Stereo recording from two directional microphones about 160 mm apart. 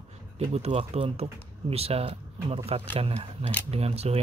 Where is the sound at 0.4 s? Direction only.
40° right (ahead or behind).